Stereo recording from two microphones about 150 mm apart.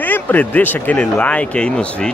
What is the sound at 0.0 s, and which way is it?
Speech, 10° left (ahead or behind).